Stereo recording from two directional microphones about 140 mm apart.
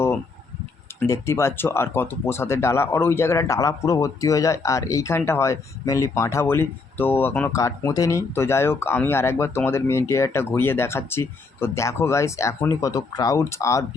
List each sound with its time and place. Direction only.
0.9 s speech: 20° left (ahead or behind)